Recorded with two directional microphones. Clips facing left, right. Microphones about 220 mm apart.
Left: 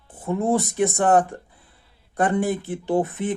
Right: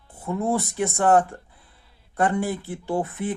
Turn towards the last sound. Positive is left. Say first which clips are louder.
# left 4 dB
turn(degrees=20)  # may be behind; listen again after turning